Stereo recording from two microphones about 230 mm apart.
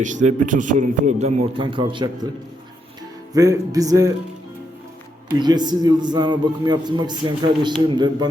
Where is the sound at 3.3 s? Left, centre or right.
Centre.